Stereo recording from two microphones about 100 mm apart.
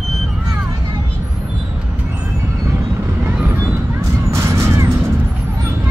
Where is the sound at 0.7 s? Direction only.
40° right (ahead or behind).